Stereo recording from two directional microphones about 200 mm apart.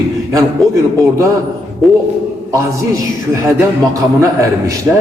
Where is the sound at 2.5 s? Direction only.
15° right (ahead or behind).